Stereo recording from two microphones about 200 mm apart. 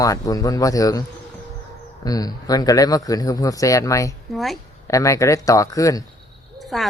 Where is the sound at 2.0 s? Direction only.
20° left (ahead or behind).